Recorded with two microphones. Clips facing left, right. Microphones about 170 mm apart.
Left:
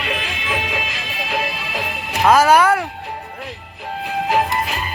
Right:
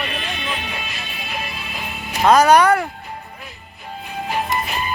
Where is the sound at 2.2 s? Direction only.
5° left (ahead or behind).